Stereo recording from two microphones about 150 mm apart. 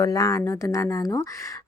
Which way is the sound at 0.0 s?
25° left (ahead or behind).